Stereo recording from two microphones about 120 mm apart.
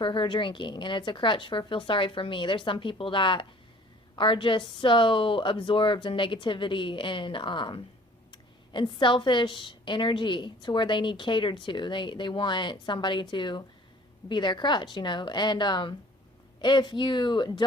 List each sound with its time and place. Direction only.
0.0 s a woman's voice: 45° left (ahead or behind)